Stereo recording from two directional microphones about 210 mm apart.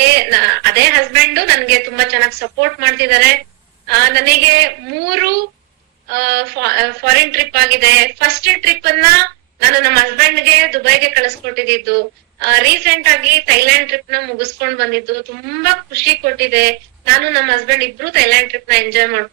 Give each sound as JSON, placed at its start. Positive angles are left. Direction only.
{"t": 0.0, "sound": "a woman's voice", "side_deg": -50}